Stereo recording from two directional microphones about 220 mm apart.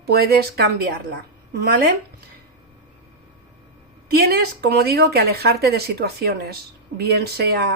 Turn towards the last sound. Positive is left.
turn(degrees=-45)  # may be behind; listen again after turning